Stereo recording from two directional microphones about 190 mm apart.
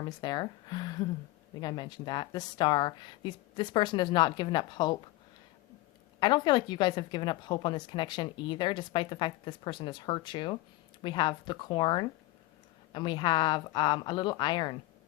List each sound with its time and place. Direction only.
0.2 s a woman's voice: 20° left (ahead or behind)
6.1 s a woman's voice: 25° left (ahead or behind)